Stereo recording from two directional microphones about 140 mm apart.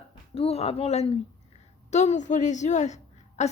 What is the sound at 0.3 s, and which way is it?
A woman's voice, 45° left (ahead or behind).